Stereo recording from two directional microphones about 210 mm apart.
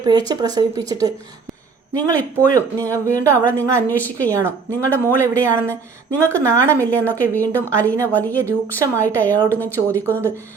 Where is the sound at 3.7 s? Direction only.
10° left (ahead or behind).